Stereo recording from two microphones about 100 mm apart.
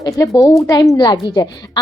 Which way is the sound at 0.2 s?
35° left (ahead or behind).